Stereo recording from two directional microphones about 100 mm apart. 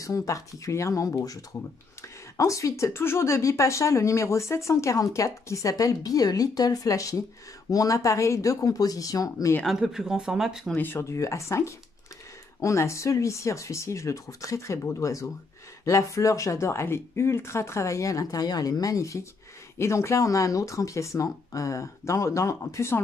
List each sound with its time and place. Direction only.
0.0 s speech: 35° left (ahead or behind)
9.7 s speech: 5° right (ahead or behind)
10.8 s speech: 25° left (ahead or behind)